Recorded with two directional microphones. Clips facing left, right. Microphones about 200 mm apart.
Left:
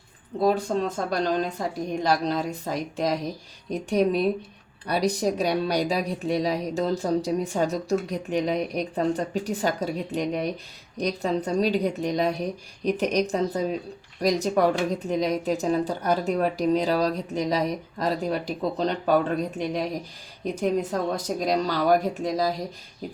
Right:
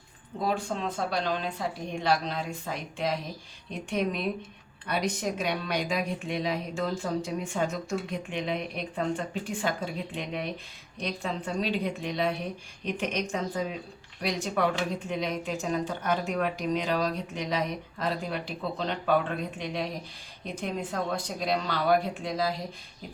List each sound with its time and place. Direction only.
0.4 s a woman's voice: 40° left (ahead or behind)